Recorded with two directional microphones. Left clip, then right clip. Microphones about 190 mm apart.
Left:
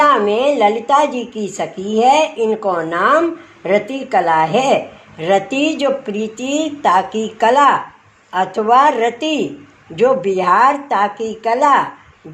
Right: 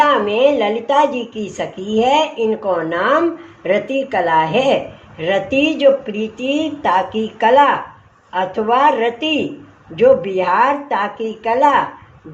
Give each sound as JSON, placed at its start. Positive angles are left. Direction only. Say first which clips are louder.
{"t": 0.0, "sound": "speech", "louder": "left 1 dB", "side_deg": 35}